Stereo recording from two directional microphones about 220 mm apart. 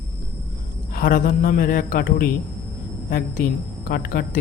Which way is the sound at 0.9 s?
40° left (ahead or behind).